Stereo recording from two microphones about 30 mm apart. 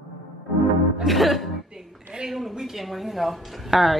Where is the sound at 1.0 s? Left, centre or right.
Centre.